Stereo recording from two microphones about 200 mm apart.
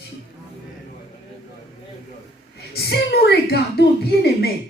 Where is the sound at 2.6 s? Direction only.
50° left (ahead or behind).